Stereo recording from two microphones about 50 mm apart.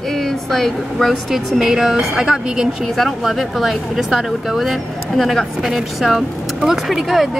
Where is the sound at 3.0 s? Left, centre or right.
Centre.